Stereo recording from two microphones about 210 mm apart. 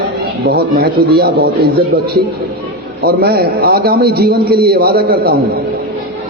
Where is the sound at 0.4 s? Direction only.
45° right (ahead or behind).